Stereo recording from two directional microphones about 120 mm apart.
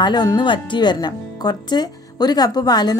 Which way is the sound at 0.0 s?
35° left (ahead or behind).